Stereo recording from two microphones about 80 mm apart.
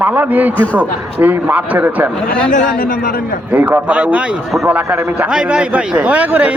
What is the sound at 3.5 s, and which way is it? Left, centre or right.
A man's voice, centre.